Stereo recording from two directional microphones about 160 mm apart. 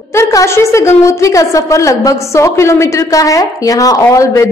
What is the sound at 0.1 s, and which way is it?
A woman's voice, 20° left (ahead or behind).